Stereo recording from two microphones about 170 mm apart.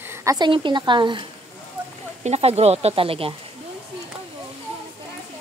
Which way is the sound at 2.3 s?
35° right (ahead or behind).